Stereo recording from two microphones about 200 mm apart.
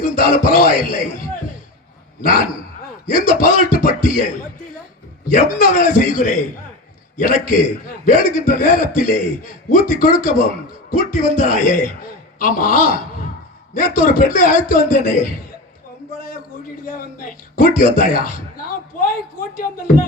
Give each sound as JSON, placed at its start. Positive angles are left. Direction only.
{"t": 0.0, "sound": "music", "side_deg": 45}
{"t": 3.1, "sound": "speech", "side_deg": 40}
{"t": 5.3, "sound": "a man's voice", "side_deg": 40}
{"t": 17.6, "sound": "a man's voice", "side_deg": 40}